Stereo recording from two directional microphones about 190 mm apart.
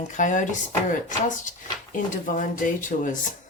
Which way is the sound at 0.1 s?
40° left (ahead or behind).